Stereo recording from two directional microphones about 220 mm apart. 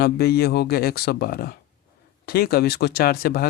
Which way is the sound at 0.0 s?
45° left (ahead or behind).